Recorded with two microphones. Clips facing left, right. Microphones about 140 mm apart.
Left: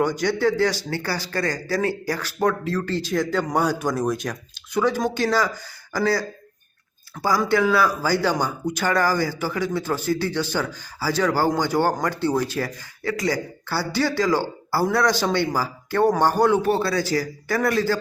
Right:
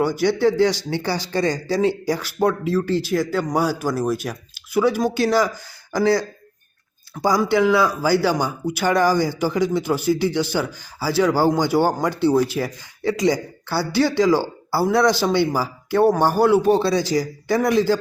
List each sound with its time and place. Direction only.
0.0 s speech: 10° right (ahead or behind)